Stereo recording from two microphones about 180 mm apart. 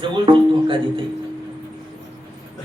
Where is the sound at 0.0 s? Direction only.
25° right (ahead or behind).